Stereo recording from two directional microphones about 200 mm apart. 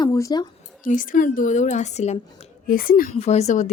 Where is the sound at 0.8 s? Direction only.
40° left (ahead or behind).